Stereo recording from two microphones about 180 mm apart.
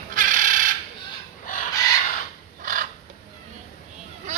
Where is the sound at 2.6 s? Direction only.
50° right (ahead or behind).